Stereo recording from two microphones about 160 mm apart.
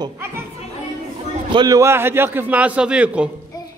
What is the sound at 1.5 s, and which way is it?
A man's voice, 20° right (ahead or behind).